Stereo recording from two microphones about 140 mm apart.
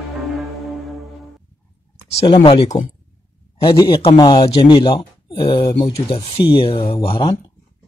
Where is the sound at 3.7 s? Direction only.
35° left (ahead or behind).